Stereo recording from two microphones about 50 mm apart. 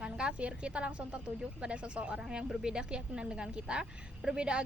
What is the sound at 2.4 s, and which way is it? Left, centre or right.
A woman's voice, centre.